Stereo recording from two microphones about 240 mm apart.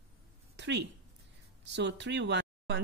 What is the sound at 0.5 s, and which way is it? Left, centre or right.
Speech, right.